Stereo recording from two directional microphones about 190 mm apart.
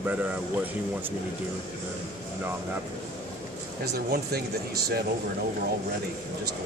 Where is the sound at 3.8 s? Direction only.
55° right (ahead or behind).